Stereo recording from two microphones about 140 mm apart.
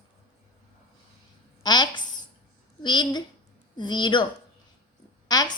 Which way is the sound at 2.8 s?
30° left (ahead or behind).